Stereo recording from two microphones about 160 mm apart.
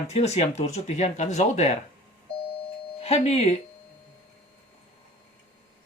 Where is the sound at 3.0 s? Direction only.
40° left (ahead or behind).